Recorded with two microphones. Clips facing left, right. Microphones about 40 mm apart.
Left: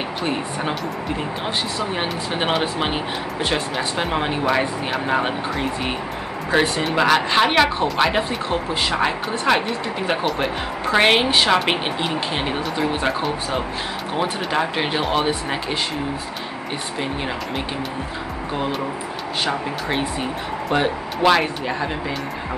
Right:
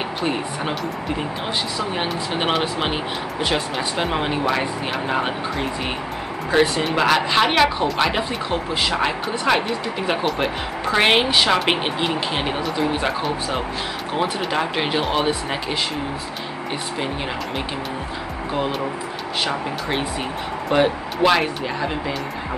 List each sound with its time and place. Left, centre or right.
0.2 s speech: centre
2.0 s speech: centre
20.7 s speech: centre